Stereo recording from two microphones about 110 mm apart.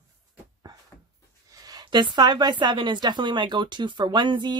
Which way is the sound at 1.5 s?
35° right (ahead or behind).